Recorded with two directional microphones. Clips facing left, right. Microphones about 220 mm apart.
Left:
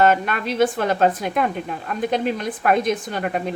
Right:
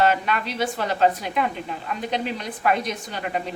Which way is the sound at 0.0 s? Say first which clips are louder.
Left 3 dB; 50° left (ahead or behind).